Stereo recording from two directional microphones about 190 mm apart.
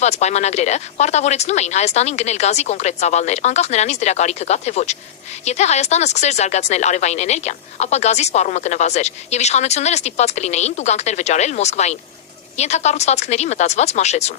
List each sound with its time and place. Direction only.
0.0 s speech: 35° left (ahead or behind)